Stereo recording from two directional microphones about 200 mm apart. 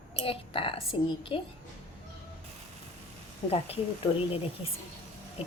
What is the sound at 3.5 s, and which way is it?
Speech, 30° left (ahead or behind).